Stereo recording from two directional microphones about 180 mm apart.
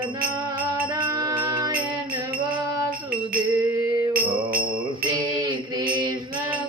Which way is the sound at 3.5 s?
20° right (ahead or behind).